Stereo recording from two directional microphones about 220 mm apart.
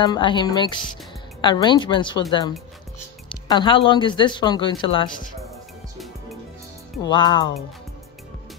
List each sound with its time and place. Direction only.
0.0 s speech: 20° left (ahead or behind)
3.3 s speech: 20° left (ahead or behind)
7.0 s speech: 20° left (ahead or behind)